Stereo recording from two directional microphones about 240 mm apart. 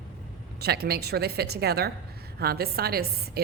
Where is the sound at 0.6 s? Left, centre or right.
Right.